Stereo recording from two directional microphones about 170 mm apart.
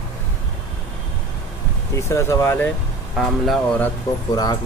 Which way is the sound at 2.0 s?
15° left (ahead or behind).